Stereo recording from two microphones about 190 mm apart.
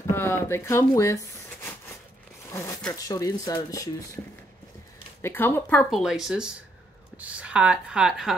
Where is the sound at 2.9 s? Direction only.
20° left (ahead or behind).